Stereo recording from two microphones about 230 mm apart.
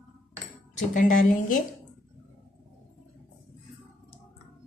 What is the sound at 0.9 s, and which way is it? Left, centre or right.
Speech, left.